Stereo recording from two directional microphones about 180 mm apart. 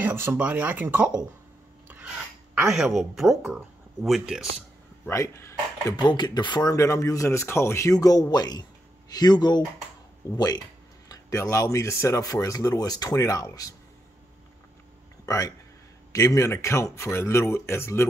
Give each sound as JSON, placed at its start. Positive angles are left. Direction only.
{"t": 0.0, "sound": "speech", "side_deg": -10}
{"t": 1.9, "sound": "a sound", "side_deg": -10}
{"t": 2.7, "sound": "speech", "side_deg": 0}
{"t": 5.0, "sound": "speech", "side_deg": 15}
{"t": 15.2, "sound": "speech", "side_deg": 15}